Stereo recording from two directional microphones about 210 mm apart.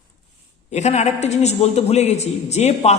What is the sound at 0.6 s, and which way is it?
Speech, 35° left (ahead or behind).